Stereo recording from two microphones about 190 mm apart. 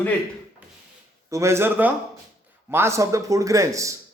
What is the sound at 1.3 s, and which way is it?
A man's voice, 15° right (ahead or behind).